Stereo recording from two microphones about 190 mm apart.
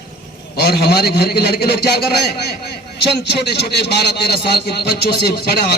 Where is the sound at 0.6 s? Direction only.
55° left (ahead or behind).